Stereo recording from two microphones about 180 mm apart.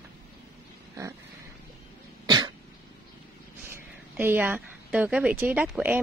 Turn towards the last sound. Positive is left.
turn(degrees=-5)  # may be behind; listen again after turning